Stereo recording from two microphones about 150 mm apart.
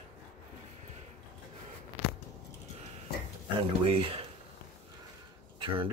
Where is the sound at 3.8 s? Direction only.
35° right (ahead or behind).